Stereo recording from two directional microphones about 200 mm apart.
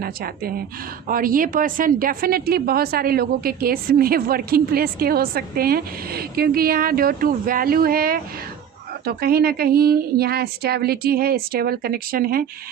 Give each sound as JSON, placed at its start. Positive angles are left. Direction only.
{"t": 0.0, "sound": "a woman's voice", "side_deg": -50}